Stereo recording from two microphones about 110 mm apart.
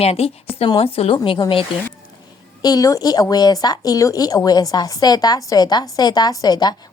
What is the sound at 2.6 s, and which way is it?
A woman's voice, 35° left (ahead or behind).